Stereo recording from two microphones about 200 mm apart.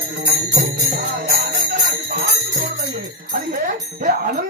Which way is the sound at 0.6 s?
40° right (ahead or behind).